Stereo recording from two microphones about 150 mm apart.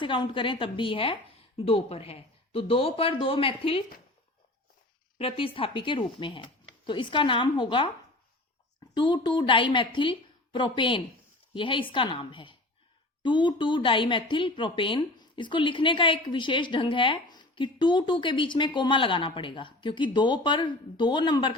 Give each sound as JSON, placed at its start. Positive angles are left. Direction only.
{"t": 0.0, "sound": "speech", "side_deg": 35}
{"t": 5.1, "sound": "speech", "side_deg": 40}
{"t": 9.0, "sound": "speech", "side_deg": 30}